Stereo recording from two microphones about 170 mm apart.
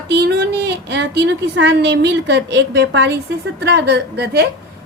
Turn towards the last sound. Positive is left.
turn(degrees=-75)  # may be behind; listen again after turning